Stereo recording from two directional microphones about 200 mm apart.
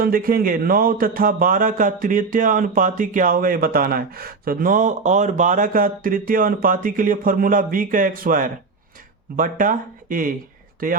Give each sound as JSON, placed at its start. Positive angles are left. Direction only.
{"t": 0.0, "sound": "speech", "side_deg": -45}